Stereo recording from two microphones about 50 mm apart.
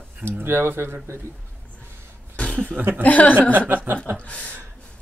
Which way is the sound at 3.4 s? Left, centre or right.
Right.